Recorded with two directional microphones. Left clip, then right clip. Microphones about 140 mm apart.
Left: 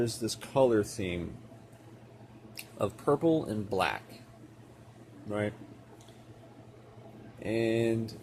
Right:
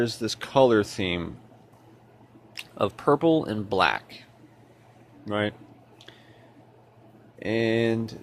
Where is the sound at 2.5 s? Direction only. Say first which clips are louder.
Right 7 dB; 45° right (ahead or behind).